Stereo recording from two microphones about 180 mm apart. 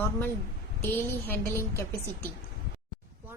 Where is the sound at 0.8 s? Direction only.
15° left (ahead or behind).